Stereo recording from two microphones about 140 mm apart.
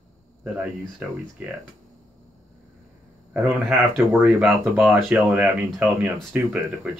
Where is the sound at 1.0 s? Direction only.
10° right (ahead or behind).